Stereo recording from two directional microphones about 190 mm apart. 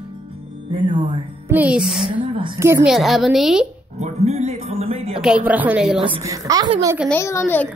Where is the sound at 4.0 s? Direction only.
35° right (ahead or behind).